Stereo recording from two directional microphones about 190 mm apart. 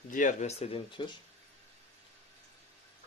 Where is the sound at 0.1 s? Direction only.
40° left (ahead or behind).